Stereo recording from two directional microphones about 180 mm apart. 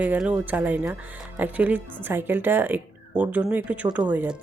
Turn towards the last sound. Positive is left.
turn(degrees=-10)  # may be behind; listen again after turning